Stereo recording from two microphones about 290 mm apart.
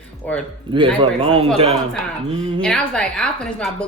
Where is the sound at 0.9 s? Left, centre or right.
Centre.